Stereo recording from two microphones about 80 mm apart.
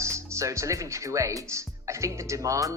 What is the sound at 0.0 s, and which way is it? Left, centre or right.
Speech, right.